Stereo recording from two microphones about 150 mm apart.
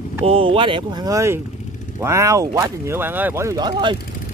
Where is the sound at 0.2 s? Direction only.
40° right (ahead or behind).